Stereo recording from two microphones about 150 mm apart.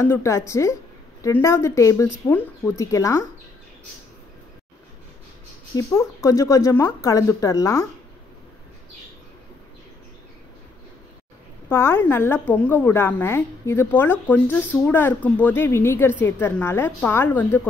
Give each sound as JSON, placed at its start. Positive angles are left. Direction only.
{"t": 0.0, "sound": "speech", "side_deg": 20}
{"t": 5.8, "sound": "speech", "side_deg": 20}
{"t": 11.7, "sound": "a woman's voice", "side_deg": 15}